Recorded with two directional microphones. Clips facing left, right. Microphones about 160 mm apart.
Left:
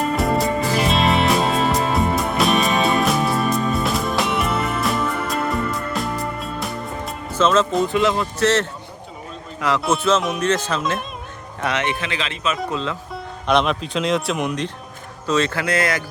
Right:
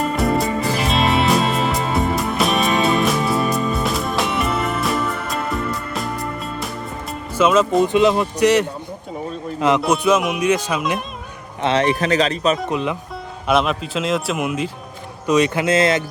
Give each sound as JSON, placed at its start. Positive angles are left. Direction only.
{"t": 0.2, "sound": "music", "side_deg": 0}
{"t": 7.3, "sound": "speech", "side_deg": -10}
{"t": 11.6, "sound": "speech", "side_deg": -35}
{"t": 12.6, "sound": "speech", "side_deg": -15}
{"t": 13.5, "sound": "speech", "side_deg": -5}
{"t": 15.3, "sound": "speech", "side_deg": -15}